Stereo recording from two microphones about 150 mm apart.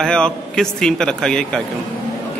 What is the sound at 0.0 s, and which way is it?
Speech, 5° left (ahead or behind).